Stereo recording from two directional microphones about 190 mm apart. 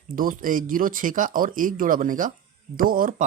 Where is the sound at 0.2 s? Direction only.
45° right (ahead or behind).